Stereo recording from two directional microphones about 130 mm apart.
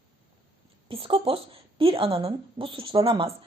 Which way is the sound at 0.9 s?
45° right (ahead or behind).